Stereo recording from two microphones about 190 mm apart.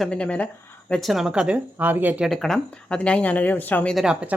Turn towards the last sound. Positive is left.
turn(degrees=-5)  # may be behind; listen again after turning